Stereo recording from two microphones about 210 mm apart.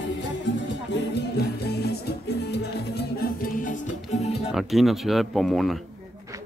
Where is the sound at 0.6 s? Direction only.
55° left (ahead or behind).